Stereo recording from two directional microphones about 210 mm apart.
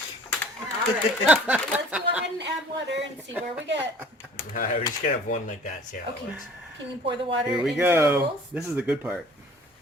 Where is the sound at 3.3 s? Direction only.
10° right (ahead or behind).